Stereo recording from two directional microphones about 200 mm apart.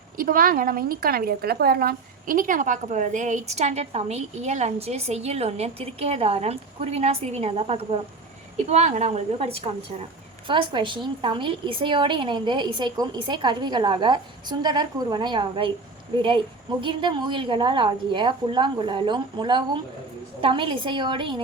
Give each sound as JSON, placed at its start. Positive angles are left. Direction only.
{"t": 0.2, "sound": "a woman's voice", "side_deg": -45}
{"t": 16.8, "sound": "a woman's voice", "side_deg": -25}